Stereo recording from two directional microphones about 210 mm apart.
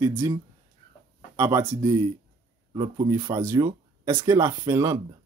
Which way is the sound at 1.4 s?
15° right (ahead or behind).